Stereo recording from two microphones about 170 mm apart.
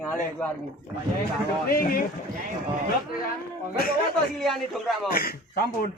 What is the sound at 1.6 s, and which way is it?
Speech, 60° left (ahead or behind).